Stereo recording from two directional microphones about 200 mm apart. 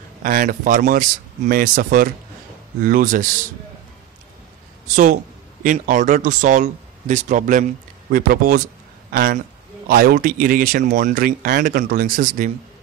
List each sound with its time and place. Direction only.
0.2 s speech: 45° right (ahead or behind)
4.8 s speech: 40° right (ahead or behind)